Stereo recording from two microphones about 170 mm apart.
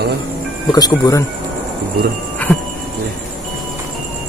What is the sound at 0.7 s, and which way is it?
Speech, 20° left (ahead or behind).